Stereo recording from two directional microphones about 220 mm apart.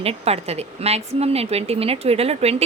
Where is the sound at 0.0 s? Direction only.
25° right (ahead or behind).